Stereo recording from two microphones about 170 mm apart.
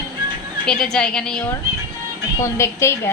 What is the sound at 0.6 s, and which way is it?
Music, 5° left (ahead or behind).